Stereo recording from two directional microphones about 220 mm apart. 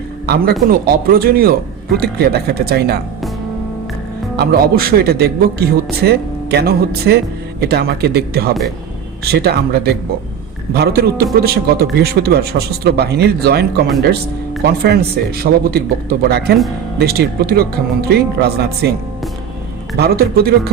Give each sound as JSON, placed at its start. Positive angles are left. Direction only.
{"t": 0.7, "sound": "a man's voice", "side_deg": -45}
{"t": 4.4, "sound": "a man's voice", "side_deg": -45}
{"t": 20.0, "sound": "a man's voice", "side_deg": -45}